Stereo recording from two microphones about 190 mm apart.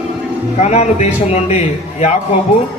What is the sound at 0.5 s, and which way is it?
Speech, 35° left (ahead or behind).